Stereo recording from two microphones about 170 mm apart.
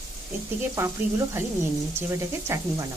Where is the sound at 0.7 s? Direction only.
15° right (ahead or behind).